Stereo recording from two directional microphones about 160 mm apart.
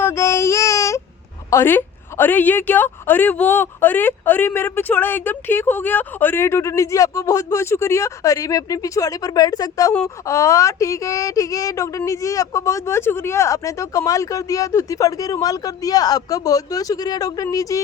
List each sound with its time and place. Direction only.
0.0 s child singing: 15° left (ahead or behind)
1.5 s a woman's voice: 15° left (ahead or behind)